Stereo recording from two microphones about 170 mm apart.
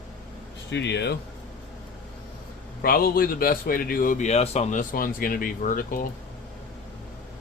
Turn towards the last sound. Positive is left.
turn(degrees=55)  # may be behind; listen again after turning